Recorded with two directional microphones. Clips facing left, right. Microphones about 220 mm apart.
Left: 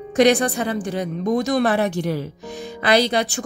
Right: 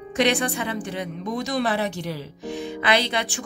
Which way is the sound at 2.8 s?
40° left (ahead or behind).